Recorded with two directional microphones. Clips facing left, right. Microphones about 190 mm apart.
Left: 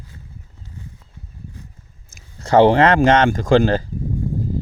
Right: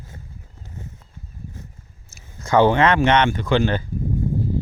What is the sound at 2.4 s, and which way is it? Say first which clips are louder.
Speech: left 4 dB; 35° left (ahead or behind).